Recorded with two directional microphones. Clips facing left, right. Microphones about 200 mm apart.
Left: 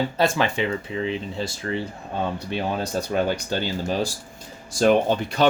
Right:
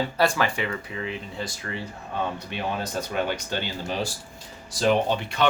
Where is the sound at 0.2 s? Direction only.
20° left (ahead or behind).